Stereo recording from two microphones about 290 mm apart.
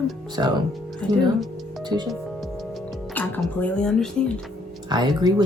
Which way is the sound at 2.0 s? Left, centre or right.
Centre.